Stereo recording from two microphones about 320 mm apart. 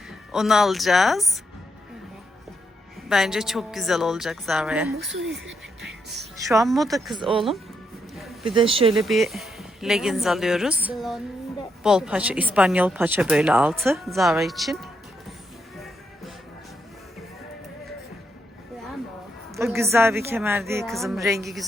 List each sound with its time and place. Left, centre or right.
0.3 s a woman's voice: centre
3.1 s a woman's voice: centre
6.5 s a woman's voice: centre
7.2 s a woman's voice: centre
8.1 s a sound: centre
8.5 s a woman's voice: centre
9.0 s a woman's voice: centre
15.3 s music: centre
19.5 s a woman's voice: centre